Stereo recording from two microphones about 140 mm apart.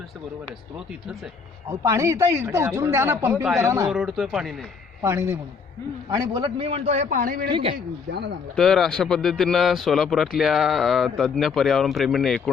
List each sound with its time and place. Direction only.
1.8 s speech: 20° right (ahead or behind)
3.8 s speech: centre (ahead or behind)
5.0 s a man's voice: 20° right (ahead or behind); by 7.2 s 50° right (ahead or behind)
7.2 s speech: 90° right
7.4 s a man's voice: 40° right (ahead or behind)
8.5 s speech: centre (ahead or behind)